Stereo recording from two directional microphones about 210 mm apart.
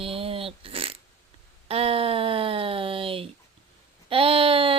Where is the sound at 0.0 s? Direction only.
25° right (ahead or behind).